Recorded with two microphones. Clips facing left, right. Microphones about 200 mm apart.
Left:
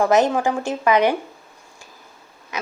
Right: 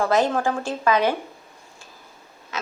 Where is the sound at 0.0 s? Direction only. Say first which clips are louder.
Left 3 dB; 20° left (ahead or behind).